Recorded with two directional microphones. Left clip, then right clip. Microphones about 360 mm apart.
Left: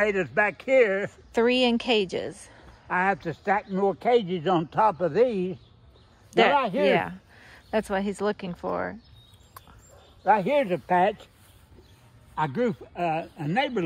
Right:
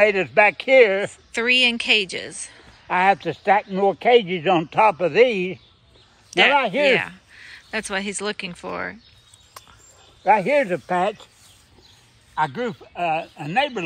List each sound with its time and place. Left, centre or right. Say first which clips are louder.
0.0 s speech: right 8 dB; centre
1.1 s speech: right 4 dB; centre
2.9 s speech: right 7 dB; centre
4.7 s speech: right 6 dB; centre
6.3 s speech: right 4 dB; centre
10.2 s speech: right 5 dB; centre
12.4 s speech: right 3 dB; centre